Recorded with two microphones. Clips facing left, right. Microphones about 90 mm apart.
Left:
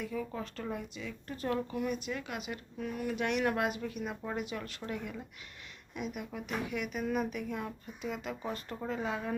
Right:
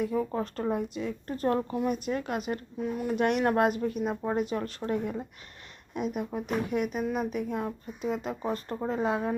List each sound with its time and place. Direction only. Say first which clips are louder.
0.0 s speech: right 8 dB; 40° right (ahead or behind)
2.7 s speech: right 4 dB; 25° right (ahead or behind)
3.2 s speech: right 7 dB; 40° right (ahead or behind)